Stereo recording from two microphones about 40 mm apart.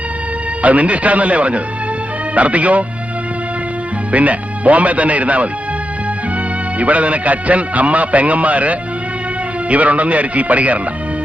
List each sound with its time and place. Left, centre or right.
0.6 s a man's voice: right
4.1 s speech: right
6.7 s a man's voice: right